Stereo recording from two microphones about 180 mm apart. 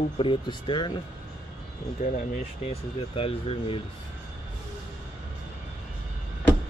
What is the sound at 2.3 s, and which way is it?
Speech, 35° left (ahead or behind).